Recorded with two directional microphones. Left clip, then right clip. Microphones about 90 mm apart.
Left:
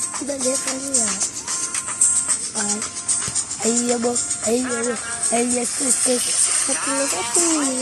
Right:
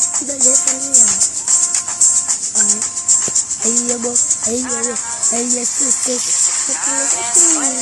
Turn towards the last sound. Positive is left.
turn(degrees=-40)  # may be behind; listen again after turning